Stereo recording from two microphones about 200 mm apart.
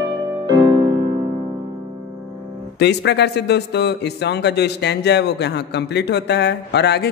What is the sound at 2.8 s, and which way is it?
Speech, 60° left (ahead or behind).